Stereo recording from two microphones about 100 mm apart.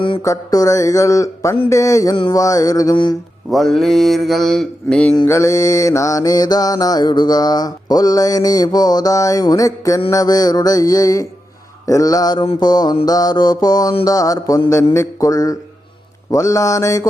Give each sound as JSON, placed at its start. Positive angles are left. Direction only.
{"t": 0.2, "sound": "mantra", "side_deg": 35}
{"t": 2.9, "sound": "mantra", "side_deg": 50}
{"t": 3.5, "sound": "mantra", "side_deg": 0}
{"t": 5.2, "sound": "mantra", "side_deg": 30}